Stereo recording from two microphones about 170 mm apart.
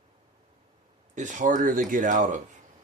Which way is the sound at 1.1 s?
45° right (ahead or behind).